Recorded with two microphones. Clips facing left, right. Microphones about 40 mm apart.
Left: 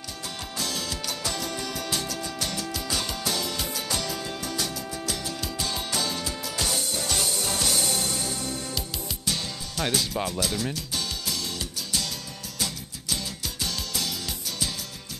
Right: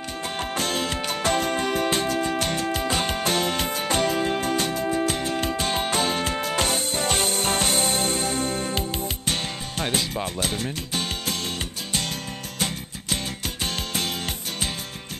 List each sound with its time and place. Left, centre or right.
0.4 s music: right
12.5 s music: right